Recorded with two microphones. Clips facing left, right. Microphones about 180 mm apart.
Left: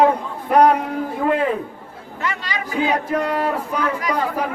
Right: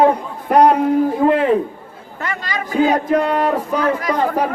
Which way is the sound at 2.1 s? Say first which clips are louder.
Right 1 dB; 45° right (ahead or behind).